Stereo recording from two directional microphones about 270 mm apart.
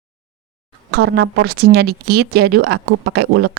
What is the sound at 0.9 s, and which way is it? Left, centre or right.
Speech, right.